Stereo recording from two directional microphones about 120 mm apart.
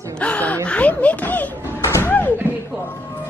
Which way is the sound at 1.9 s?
15° left (ahead or behind).